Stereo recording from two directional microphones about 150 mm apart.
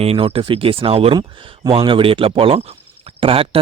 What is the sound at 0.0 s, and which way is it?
Speech, 40° right (ahead or behind).